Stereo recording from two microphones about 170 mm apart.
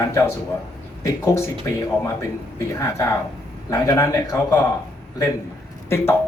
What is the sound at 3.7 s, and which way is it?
Speech, 20° left (ahead or behind).